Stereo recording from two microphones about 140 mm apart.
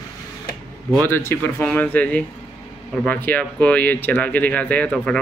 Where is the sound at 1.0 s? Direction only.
15° left (ahead or behind).